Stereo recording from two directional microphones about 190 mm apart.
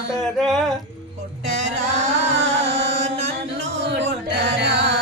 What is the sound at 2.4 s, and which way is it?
Carnatic music, 65° right (ahead or behind).